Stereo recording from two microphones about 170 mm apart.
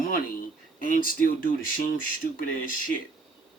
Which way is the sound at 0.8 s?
50° left (ahead or behind).